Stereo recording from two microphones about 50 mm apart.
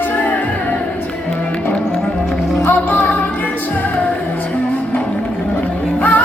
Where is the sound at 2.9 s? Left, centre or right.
Left.